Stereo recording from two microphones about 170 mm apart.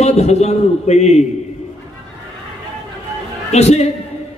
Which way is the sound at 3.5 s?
40° left (ahead or behind).